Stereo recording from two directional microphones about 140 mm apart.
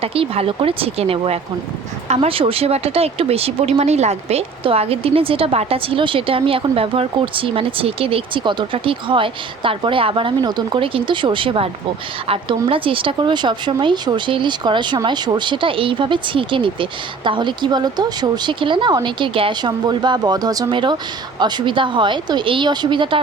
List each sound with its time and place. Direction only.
0.0 s speech: 45° right (ahead or behind)